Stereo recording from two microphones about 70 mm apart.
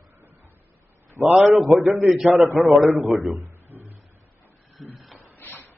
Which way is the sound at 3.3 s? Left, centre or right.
Right.